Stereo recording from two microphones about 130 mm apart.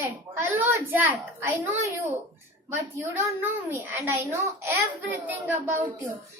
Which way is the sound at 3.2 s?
15° right (ahead or behind).